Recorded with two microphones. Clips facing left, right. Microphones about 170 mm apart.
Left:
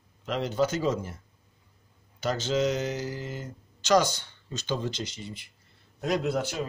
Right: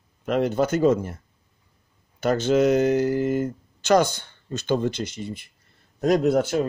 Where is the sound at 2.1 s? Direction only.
55° right (ahead or behind).